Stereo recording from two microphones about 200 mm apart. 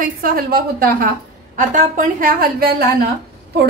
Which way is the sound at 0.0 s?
45° right (ahead or behind).